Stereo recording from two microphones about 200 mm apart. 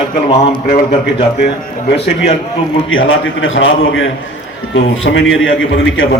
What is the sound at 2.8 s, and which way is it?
A man's voice, 80° left.